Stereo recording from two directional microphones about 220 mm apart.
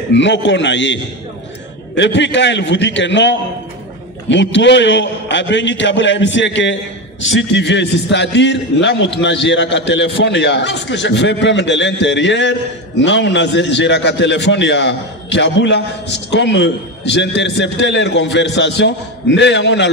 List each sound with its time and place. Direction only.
0.1 s a man's voice: 55° left (ahead or behind)
2.0 s a man's voice: 55° left (ahead or behind)